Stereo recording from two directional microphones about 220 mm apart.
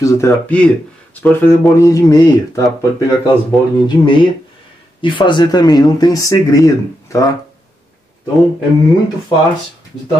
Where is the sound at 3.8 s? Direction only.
20° left (ahead or behind).